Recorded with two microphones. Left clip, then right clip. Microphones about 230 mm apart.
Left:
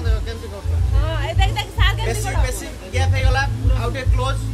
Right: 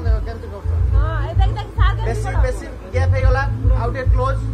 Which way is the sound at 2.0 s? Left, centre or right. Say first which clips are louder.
Even; left.